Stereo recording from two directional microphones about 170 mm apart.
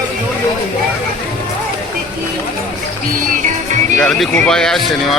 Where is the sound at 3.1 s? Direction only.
55° right (ahead or behind).